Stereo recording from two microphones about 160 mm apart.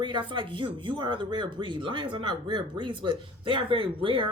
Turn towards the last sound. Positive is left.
turn(degrees=-35)  # may be behind; listen again after turning